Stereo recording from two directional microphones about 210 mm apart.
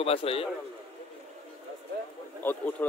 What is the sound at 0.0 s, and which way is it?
Speech, 25° left (ahead or behind).